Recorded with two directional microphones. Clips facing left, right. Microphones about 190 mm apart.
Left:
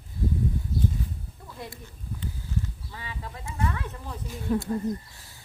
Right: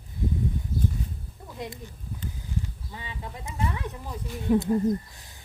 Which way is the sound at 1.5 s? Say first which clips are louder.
Right 4 dB; 20° right (ahead or behind).